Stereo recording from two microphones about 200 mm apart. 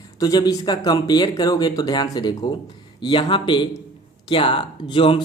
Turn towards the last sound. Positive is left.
turn(degrees=25)  # may be behind; listen again after turning